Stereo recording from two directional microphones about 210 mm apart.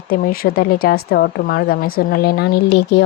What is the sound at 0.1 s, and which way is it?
Speech, 45° left (ahead or behind).